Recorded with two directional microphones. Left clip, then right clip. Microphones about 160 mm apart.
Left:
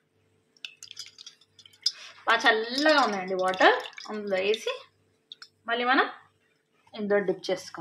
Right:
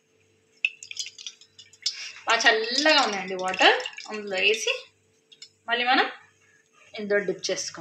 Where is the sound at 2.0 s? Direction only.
55° left (ahead or behind).